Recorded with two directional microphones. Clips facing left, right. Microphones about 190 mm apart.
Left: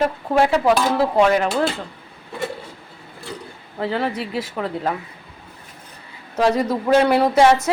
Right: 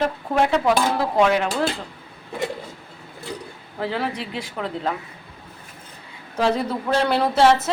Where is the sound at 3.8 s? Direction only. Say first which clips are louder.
Left 3 dB; centre (ahead or behind).